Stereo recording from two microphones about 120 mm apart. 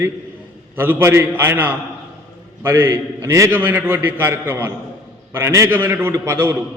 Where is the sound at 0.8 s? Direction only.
15° right (ahead or behind).